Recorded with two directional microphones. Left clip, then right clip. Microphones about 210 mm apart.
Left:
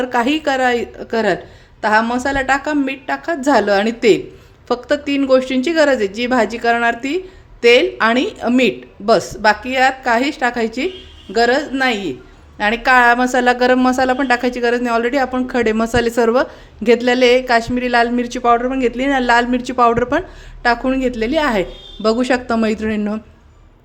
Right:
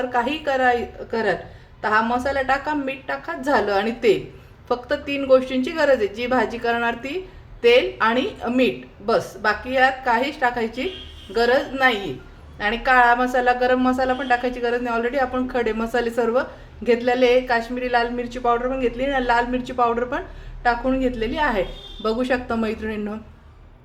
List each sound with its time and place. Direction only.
0.0 s a woman's voice: 50° left (ahead or behind)